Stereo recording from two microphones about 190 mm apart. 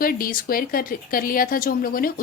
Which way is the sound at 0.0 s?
50° left (ahead or behind).